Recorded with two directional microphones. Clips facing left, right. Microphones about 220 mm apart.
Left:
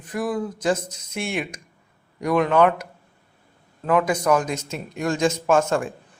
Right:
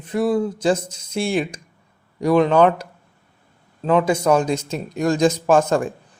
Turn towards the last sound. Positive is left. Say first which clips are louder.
# right 3 dB
turn(degrees=-35)  # may be behind; listen again after turning